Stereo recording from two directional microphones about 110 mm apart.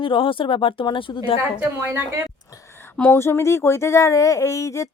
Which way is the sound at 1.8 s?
20° right (ahead or behind).